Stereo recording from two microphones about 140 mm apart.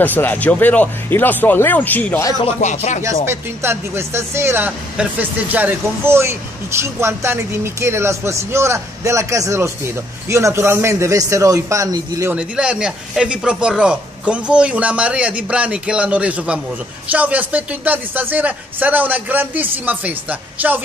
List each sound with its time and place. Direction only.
0.0 s speech: 15° left (ahead or behind)
2.4 s speech: 55° left (ahead or behind)
3.3 s speech: 20° right (ahead or behind)
12.4 s speech: 5° right (ahead or behind)